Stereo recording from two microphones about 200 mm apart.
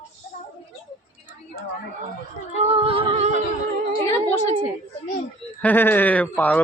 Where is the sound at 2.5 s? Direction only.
30° right (ahead or behind).